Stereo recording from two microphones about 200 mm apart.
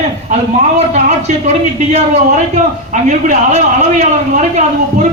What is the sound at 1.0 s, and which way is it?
Speech, 35° right (ahead or behind).